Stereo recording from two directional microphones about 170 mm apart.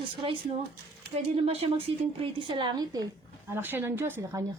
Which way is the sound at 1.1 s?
35° right (ahead or behind).